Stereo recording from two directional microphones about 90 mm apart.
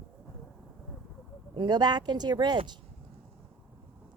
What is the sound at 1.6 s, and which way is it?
Speech, 50° right (ahead or behind).